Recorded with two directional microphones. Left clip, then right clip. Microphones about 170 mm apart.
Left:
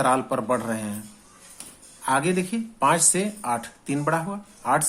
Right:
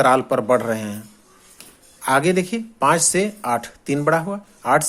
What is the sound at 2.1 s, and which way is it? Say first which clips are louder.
Speech: right 5 dB; 40° right (ahead or behind).